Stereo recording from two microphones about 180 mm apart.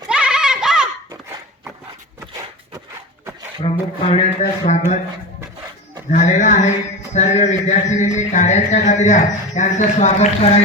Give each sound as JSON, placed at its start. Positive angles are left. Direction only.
{"t": 0.1, "sound": "a sound", "side_deg": -5}
{"t": 3.6, "sound": "a man's voice", "side_deg": 35}
{"t": 6.1, "sound": "a man's voice", "side_deg": 40}